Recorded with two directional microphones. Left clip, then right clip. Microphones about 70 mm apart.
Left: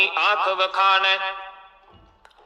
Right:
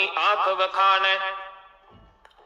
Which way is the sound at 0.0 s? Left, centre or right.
Left.